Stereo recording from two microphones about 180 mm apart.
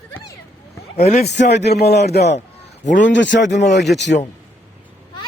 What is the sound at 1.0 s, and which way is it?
Speech, 35° left (ahead or behind).